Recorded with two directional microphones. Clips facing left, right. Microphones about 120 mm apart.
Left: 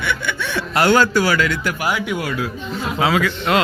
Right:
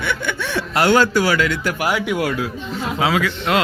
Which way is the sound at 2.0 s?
90° right.